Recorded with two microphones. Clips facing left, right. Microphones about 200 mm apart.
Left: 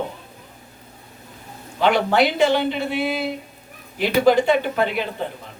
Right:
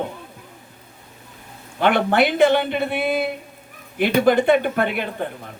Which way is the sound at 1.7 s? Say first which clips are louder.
Even; 55° right (ahead or behind).